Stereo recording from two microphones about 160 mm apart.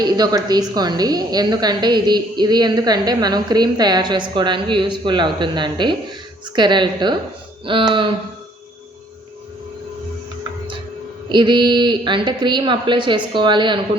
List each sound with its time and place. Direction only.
0.0 s a woman's voice: 25° right (ahead or behind)
11.3 s a woman's voice: 30° right (ahead or behind)